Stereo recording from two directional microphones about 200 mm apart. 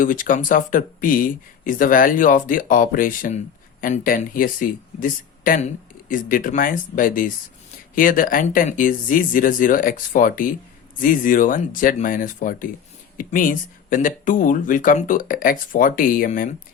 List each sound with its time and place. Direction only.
0.0 s speech: 40° left (ahead or behind)